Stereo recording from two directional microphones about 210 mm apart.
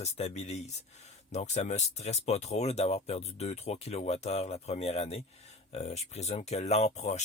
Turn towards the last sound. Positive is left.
turn(degrees=30)  # may be behind; listen again after turning